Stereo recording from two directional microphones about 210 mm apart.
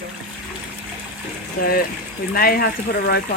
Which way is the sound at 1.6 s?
45° left (ahead or behind).